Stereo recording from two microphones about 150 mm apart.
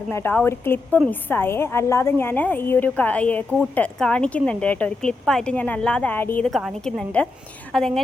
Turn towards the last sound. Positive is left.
turn(degrees=5)  # may be behind; listen again after turning